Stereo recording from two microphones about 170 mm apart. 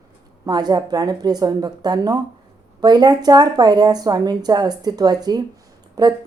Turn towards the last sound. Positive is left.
turn(degrees=-25)  # may be behind; listen again after turning